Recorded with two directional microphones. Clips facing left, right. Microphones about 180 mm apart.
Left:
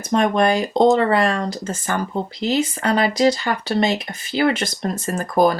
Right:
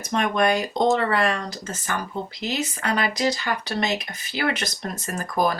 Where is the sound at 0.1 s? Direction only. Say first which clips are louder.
Left 4 dB; 35° left (ahead or behind).